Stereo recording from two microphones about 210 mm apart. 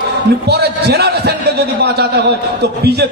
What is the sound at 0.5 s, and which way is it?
A man's voice, 50° right (ahead or behind).